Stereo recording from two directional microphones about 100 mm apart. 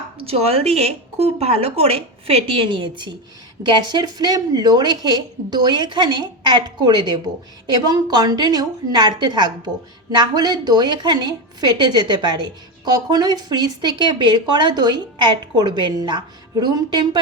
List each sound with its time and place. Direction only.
0.2 s a woman's voice: 80° right; by 17.2 s 45° right (ahead or behind)